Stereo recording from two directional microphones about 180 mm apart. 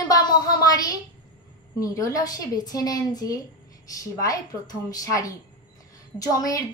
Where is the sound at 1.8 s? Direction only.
20° left (ahead or behind).